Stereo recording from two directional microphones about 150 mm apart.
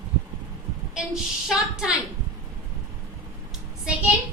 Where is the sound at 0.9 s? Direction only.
5° right (ahead or behind).